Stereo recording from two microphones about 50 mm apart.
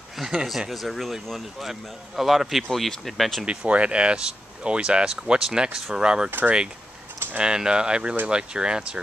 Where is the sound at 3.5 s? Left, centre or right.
Right.